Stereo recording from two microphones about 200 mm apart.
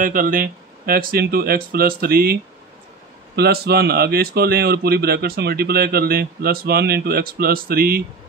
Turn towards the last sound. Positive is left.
turn(degrees=-50)  # may be behind; listen again after turning